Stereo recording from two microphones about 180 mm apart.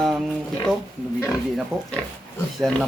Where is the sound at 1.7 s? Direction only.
15° right (ahead or behind).